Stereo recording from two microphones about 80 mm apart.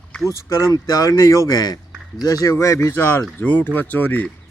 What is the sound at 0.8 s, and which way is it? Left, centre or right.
Speech, left.